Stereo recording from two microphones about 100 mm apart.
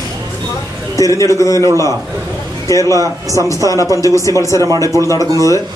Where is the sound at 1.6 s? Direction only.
35° right (ahead or behind).